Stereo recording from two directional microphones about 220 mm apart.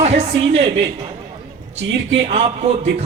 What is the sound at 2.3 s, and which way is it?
Speech, 25° right (ahead or behind).